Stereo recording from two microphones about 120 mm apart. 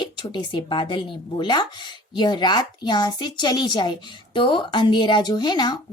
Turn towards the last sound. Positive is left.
turn(degrees=35)  # may be behind; listen again after turning